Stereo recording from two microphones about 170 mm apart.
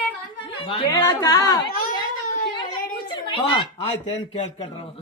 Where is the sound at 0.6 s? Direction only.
35° left (ahead or behind).